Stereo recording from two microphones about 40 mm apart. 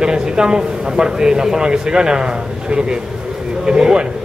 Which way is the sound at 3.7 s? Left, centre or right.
Right.